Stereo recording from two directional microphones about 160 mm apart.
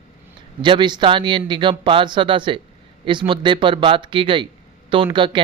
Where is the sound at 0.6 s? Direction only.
30° right (ahead or behind).